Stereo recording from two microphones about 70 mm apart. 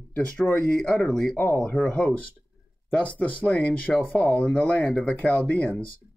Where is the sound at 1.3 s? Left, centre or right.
Left.